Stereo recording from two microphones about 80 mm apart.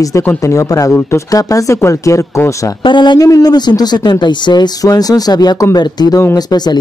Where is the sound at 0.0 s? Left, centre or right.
Left.